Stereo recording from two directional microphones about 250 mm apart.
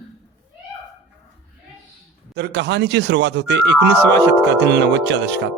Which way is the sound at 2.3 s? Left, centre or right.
Right.